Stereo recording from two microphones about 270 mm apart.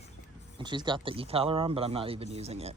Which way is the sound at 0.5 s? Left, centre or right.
Centre.